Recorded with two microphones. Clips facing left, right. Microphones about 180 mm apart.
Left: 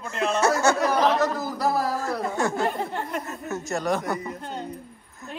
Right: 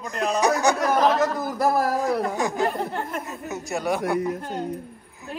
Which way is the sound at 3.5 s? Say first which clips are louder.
Even; 15° right (ahead or behind).